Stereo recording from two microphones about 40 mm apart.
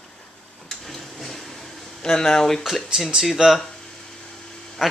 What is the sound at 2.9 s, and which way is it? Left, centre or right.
Speech, centre.